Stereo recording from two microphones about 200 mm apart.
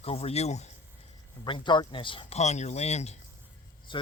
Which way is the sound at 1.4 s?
25° left (ahead or behind).